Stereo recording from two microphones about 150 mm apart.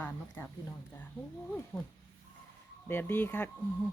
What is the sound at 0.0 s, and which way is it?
Speech, 15° left (ahead or behind).